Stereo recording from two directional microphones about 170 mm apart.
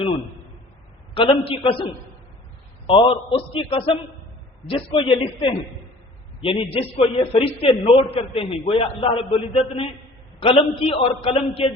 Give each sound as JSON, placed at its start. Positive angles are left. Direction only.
{"t": 1.1, "sound": "a man's voice", "side_deg": 30}
{"t": 2.8, "sound": "a man's voice", "side_deg": 30}